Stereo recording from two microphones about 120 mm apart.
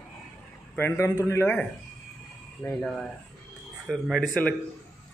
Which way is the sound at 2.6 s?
5° left (ahead or behind).